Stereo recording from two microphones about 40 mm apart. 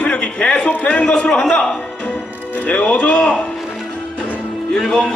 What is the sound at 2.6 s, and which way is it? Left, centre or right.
Speech, left.